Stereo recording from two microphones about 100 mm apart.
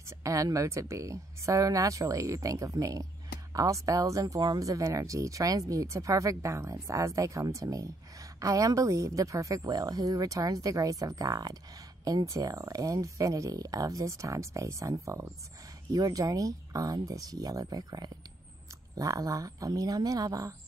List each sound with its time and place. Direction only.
0.2 s speech: 35° right (ahead or behind)